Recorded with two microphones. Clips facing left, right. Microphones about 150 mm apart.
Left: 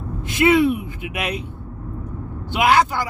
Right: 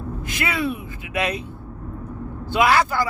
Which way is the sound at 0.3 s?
20° left (ahead or behind).